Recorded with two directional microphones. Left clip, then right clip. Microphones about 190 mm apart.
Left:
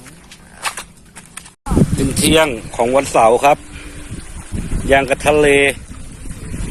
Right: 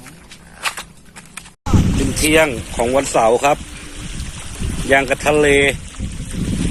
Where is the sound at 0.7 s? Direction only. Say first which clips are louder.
Even; 30° left (ahead or behind).